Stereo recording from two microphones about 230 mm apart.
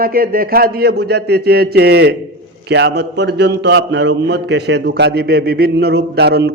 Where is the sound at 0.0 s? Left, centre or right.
Right.